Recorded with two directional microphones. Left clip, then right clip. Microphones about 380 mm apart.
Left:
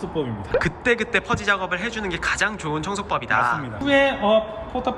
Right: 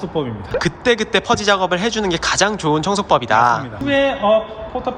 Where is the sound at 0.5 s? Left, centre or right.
Centre.